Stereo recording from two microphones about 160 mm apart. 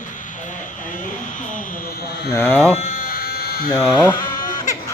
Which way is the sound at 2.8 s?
55° left (ahead or behind).